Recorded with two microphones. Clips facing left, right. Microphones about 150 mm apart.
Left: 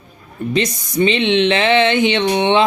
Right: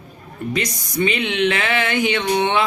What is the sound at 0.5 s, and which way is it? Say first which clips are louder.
Speech: left 6 dB; 25° left (ahead or behind).